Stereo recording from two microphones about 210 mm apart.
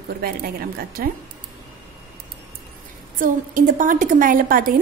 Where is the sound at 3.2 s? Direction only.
40° right (ahead or behind).